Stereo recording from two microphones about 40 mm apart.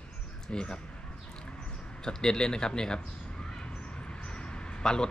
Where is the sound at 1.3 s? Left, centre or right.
Centre.